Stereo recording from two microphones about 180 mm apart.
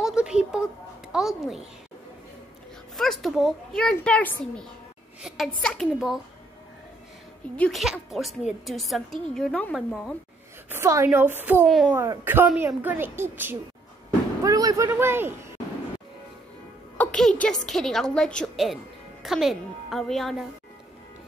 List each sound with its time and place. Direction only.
0.0 s a sound: 5° right (ahead or behind)
1.1 s a woman's voice: centre (ahead or behind)
3.0 s a woman's voice: centre (ahead or behind)
7.5 s a woman's voice: 5° left (ahead or behind)
10.7 s a woman's voice: 15° right (ahead or behind)
11.6 s a woman's voice: centre (ahead or behind)
12.0 s a woman's voice: 15° right (ahead or behind)
16.9 s a woman's voice: 5° left (ahead or behind)